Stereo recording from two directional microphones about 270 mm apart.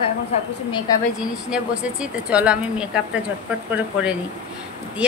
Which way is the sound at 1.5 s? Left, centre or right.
Centre.